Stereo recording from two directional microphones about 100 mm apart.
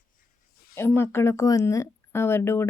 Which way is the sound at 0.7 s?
25° left (ahead or behind).